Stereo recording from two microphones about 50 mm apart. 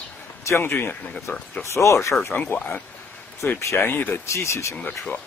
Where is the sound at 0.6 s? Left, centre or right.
Left.